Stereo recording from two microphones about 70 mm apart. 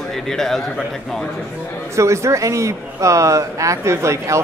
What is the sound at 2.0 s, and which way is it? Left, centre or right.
Speech, right.